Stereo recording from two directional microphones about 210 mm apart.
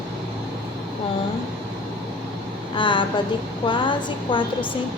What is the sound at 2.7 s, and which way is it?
A woman's voice, 25° left (ahead or behind).